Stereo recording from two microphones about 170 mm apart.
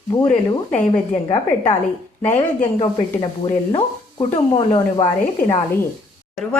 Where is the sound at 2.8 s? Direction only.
30° left (ahead or behind).